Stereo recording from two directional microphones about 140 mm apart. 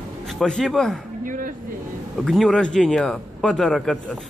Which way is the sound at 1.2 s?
70° right (ahead or behind).